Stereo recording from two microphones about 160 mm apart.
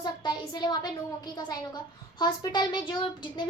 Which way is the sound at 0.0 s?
30° left (ahead or behind).